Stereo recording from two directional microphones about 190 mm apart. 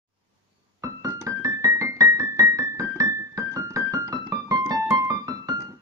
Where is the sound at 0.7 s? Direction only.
15° right (ahead or behind).